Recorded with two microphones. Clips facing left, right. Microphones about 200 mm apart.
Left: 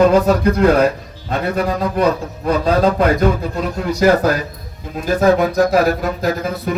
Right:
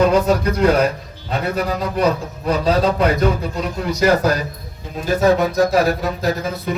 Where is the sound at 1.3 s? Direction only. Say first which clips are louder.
Left 2 dB; 45° left (ahead or behind).